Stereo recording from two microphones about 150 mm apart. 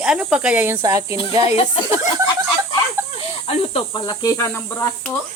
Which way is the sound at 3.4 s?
40° left (ahead or behind).